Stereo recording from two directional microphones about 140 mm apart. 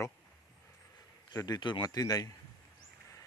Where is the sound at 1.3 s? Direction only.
30° left (ahead or behind).